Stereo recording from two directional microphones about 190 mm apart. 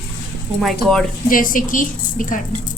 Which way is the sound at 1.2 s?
45° left (ahead or behind).